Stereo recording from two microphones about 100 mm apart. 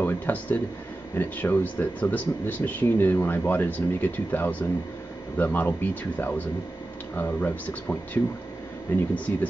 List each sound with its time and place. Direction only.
0.0 s speech: 20° left (ahead or behind)